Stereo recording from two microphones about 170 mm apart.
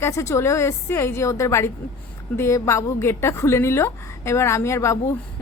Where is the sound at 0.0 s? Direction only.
15° left (ahead or behind).